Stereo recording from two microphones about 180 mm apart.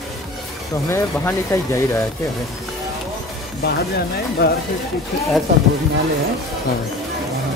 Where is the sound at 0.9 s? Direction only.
15° left (ahead or behind).